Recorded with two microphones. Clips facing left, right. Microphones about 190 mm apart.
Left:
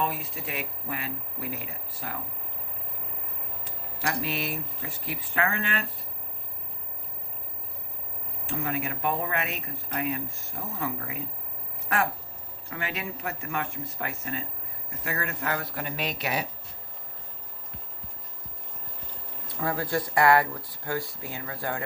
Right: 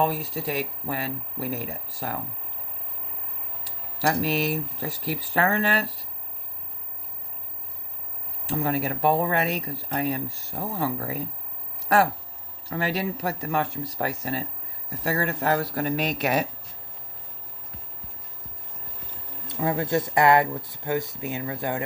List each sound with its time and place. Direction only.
0.0 s speech: 40° right (ahead or behind)
4.0 s speech: 40° right (ahead or behind)
8.4 s speech: 35° right (ahead or behind)
12.6 s speech: 35° right (ahead or behind)
19.5 s speech: 20° right (ahead or behind)